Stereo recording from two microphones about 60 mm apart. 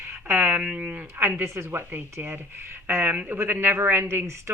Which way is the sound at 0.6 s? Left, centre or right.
Right.